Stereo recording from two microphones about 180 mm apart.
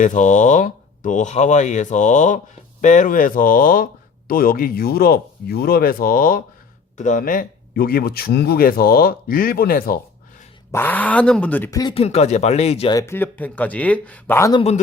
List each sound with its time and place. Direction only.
0.0 s speech: 45° left (ahead or behind)
10.7 s speech: 10° left (ahead or behind)
11.9 s speech: 35° left (ahead or behind)
12.9 s speech: 15° left (ahead or behind)